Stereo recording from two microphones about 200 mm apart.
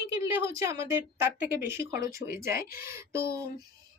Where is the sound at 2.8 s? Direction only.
10° right (ahead or behind).